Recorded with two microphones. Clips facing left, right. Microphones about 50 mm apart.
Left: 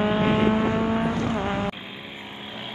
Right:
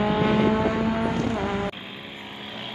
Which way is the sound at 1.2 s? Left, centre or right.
Left.